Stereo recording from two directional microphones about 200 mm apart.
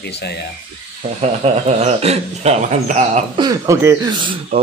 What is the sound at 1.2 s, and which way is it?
Speech, 35° right (ahead or behind).